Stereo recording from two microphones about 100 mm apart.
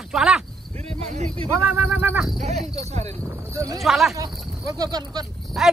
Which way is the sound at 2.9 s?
90° right.